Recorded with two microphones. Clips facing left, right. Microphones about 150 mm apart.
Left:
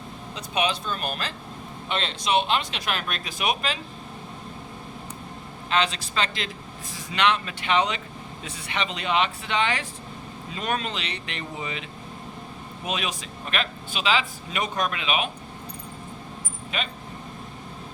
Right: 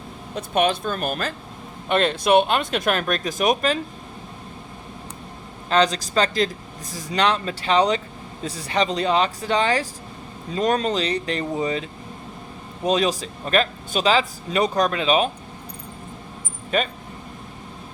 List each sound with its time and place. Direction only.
0.3 s speech: 50° right (ahead or behind)
5.6 s a man's voice: 40° right (ahead or behind)
16.7 s a man's voice: 40° right (ahead or behind)